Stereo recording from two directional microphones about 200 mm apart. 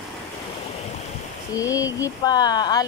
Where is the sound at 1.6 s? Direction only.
15° left (ahead or behind).